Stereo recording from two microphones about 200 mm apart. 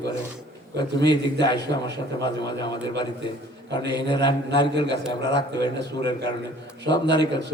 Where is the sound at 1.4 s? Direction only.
60° right (ahead or behind).